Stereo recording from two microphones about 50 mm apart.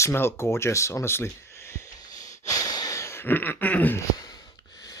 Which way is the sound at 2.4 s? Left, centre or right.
Left.